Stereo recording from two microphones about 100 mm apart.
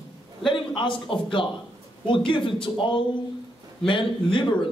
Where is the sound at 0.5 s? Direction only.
55° left (ahead or behind).